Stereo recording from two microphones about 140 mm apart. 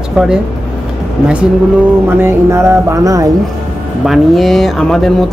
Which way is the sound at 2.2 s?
15° right (ahead or behind).